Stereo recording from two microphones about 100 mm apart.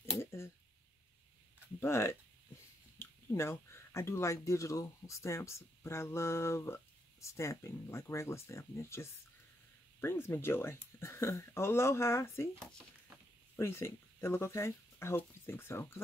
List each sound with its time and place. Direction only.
0.0 s a sound: 25° left (ahead or behind)
1.8 s speech: 25° left (ahead or behind)
13.6 s speech: 25° left (ahead or behind)